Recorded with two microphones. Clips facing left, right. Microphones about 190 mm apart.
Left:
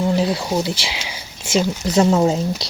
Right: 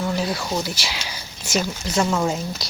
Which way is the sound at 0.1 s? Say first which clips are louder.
Left 5 dB; 30° left (ahead or behind).